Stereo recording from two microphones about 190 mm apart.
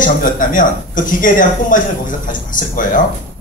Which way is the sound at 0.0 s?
45° left (ahead or behind).